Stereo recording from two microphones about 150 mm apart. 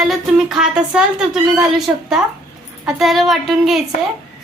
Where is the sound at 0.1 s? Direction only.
5° right (ahead or behind).